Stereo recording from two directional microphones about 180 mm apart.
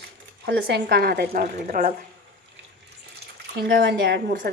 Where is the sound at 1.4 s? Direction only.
45° right (ahead or behind).